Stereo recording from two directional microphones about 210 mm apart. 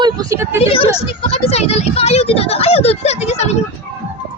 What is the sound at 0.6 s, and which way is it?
Speech, 25° left (ahead or behind).